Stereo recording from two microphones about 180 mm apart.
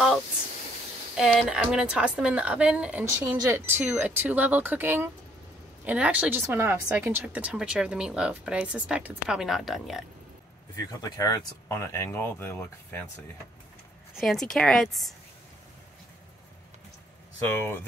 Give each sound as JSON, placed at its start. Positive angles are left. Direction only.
{"t": 1.1, "sound": "a woman's voice", "side_deg": 0}
{"t": 10.8, "sound": "speech", "side_deg": 20}
{"t": 17.5, "sound": "speech", "side_deg": 10}